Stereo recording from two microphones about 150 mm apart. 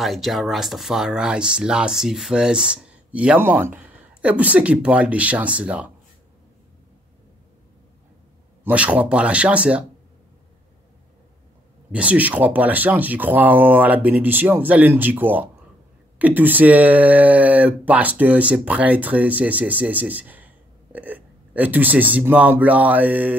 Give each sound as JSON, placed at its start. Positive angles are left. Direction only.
{"t": 0.0, "sound": "speech", "side_deg": 0}
{"t": 8.6, "sound": "speech", "side_deg": -10}
{"t": 11.9, "sound": "speech", "side_deg": -10}